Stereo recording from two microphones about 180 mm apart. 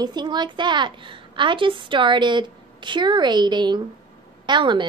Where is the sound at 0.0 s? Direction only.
25° right (ahead or behind).